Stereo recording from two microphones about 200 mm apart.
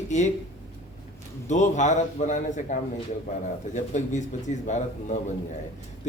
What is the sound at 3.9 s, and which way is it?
Speech, 35° left (ahead or behind).